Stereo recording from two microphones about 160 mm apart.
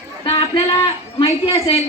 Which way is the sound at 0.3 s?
35° left (ahead or behind).